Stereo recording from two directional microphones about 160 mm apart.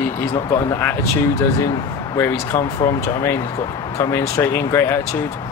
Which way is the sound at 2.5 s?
20° left (ahead or behind).